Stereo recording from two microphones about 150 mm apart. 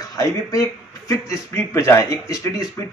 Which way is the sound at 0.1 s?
20° left (ahead or behind).